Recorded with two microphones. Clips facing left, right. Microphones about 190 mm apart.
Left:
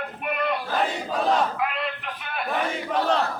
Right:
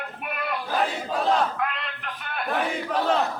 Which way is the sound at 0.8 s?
Centre (ahead or behind).